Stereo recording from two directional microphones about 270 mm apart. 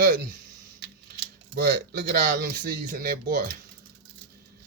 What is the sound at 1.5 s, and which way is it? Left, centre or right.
Speech, right.